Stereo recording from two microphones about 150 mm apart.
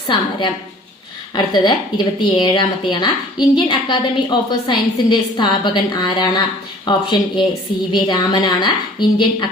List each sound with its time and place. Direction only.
0.1 s a woman's voice: 30° left (ahead or behind)